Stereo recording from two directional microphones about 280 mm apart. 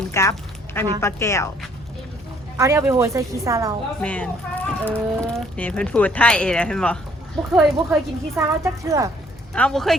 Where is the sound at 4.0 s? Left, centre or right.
Centre.